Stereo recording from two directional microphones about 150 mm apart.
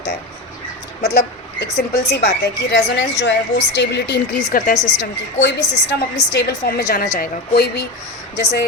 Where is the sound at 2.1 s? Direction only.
90° left.